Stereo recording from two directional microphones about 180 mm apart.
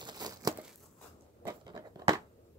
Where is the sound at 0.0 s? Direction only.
20° right (ahead or behind).